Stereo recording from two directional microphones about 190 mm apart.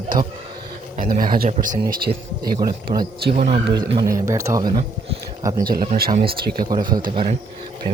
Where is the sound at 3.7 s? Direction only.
60° right (ahead or behind).